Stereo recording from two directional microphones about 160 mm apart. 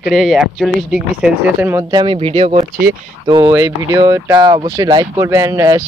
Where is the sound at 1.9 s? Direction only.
30° right (ahead or behind).